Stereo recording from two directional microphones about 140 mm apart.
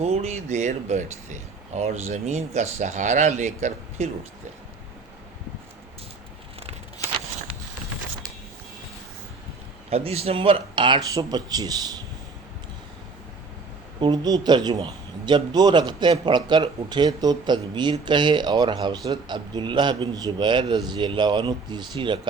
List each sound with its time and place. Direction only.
0.0 s speech: 50° right (ahead or behind)
9.9 s a man's voice: 45° right (ahead or behind); by 11.9 s 30° right (ahead or behind)
14.0 s a man's voice: 30° right (ahead or behind)